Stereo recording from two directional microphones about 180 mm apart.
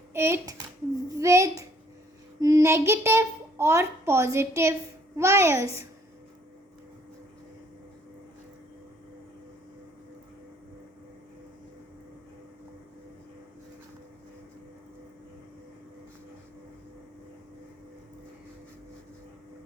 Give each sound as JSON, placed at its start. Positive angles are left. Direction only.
{"t": 0.1, "sound": "a child's voice", "side_deg": -15}